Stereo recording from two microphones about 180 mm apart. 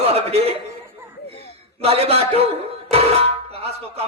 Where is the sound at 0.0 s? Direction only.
35° right (ahead or behind).